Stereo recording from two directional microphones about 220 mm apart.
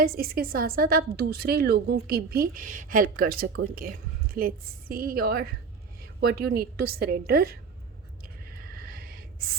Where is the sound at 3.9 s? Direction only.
40° right (ahead or behind).